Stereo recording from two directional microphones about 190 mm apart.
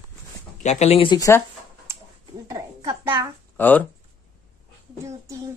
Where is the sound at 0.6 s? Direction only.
35° left (ahead or behind); by 1.4 s 20° left (ahead or behind).